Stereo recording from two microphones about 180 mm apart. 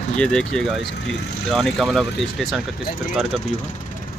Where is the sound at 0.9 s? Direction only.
70° left (ahead or behind).